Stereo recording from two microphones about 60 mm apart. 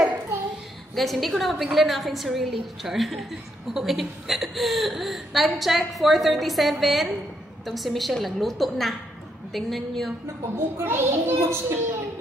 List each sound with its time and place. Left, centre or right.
0.9 s a woman's voice: centre
10.5 s a child's voice: right